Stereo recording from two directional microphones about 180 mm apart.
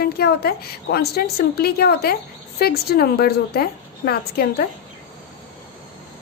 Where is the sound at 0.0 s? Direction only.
60° left (ahead or behind).